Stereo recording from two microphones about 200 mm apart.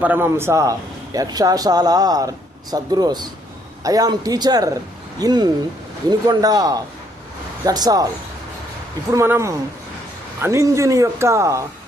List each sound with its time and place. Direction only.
0.0 s a man's voice: 10° right (ahead or behind)
9.1 s speech: 15° right (ahead or behind)